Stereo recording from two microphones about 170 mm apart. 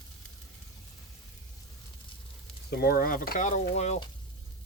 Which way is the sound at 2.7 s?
60° left (ahead or behind).